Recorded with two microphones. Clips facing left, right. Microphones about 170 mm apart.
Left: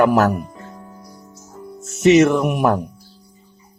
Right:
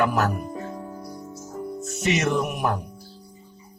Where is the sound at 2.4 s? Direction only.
60° left (ahead or behind).